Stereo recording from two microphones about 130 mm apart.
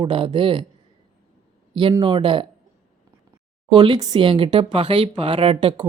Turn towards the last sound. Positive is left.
turn(degrees=-40)  # may be behind; listen again after turning